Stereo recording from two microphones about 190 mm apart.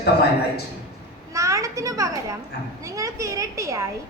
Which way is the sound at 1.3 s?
15° right (ahead or behind).